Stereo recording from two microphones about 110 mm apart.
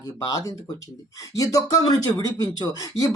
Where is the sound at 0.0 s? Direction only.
35° left (ahead or behind).